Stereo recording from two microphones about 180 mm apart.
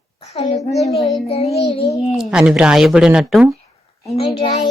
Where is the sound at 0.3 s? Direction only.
40° left (ahead or behind).